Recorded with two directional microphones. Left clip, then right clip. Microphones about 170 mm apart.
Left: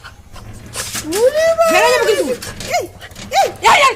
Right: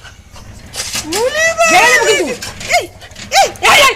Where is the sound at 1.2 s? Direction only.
5° left (ahead or behind).